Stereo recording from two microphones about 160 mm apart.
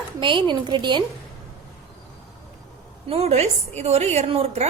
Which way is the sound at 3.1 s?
40° right (ahead or behind).